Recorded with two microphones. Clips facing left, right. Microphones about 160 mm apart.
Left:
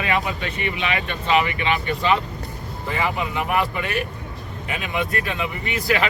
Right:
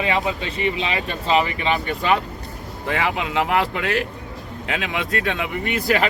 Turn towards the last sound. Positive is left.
turn(degrees=-50)  # may be behind; listen again after turning